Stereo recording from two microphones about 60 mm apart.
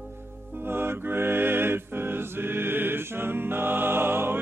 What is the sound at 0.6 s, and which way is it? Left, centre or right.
Music, right.